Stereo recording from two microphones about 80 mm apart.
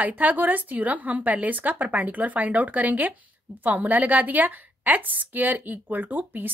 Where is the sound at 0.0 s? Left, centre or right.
Centre.